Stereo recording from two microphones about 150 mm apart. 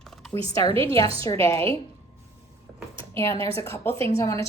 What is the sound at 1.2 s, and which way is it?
Speech, 20° left (ahead or behind).